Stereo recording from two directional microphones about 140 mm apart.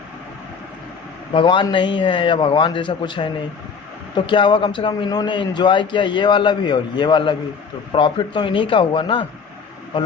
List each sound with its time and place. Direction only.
1.3 s a man's voice: 35° left (ahead or behind)